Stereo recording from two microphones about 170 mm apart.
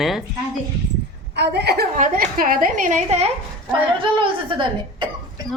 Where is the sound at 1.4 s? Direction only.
80° right.